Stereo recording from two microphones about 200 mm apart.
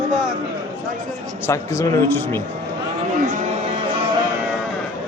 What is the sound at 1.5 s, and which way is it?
Speech, 15° left (ahead or behind).